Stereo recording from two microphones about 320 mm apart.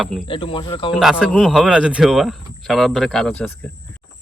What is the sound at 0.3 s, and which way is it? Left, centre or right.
Speech, centre.